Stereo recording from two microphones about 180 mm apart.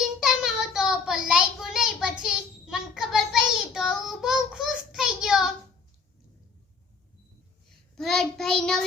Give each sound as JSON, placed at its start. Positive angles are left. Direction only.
{"t": 0.2, "sound": "child singing", "side_deg": -5}
{"t": 7.9, "sound": "child singing", "side_deg": 0}